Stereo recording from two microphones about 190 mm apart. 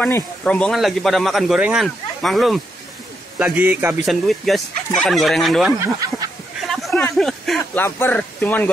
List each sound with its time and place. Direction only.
0.0 s a man's voice: 5° left (ahead or behind); by 3.9 s 10° right (ahead or behind)
4.0 s speech: centre (ahead or behind)
5.7 s speech: 15° right (ahead or behind)
6.7 s a sound: centre (ahead or behind)
7.8 s speech: 10° left (ahead or behind)